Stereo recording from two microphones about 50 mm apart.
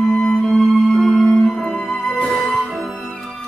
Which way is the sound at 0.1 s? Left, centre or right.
Centre.